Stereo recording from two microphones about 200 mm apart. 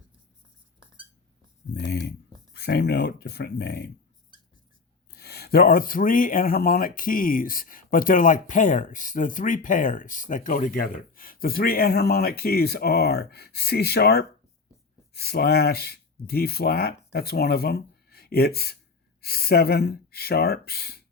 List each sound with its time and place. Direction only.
1.7 s speech: 60° left (ahead or behind)
5.1 s speech: 55° left (ahead or behind)